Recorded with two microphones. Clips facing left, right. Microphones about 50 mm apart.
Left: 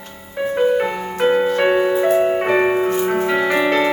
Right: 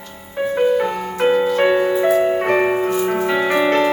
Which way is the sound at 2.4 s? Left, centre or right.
Centre.